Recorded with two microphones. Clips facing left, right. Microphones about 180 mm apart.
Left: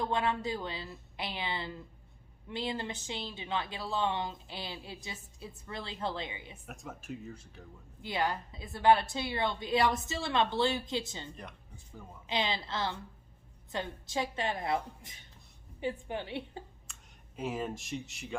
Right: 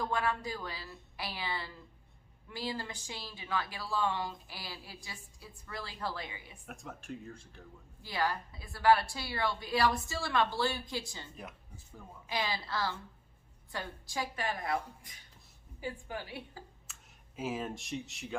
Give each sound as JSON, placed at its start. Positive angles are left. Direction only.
{"t": 0.0, "sound": "speech", "side_deg": 25}
{"t": 6.7, "sound": "speech", "side_deg": 0}
{"t": 8.0, "sound": "speech", "side_deg": 20}
{"t": 11.3, "sound": "speech", "side_deg": -5}
{"t": 12.3, "sound": "speech", "side_deg": 25}
{"t": 16.8, "sound": "speech", "side_deg": -5}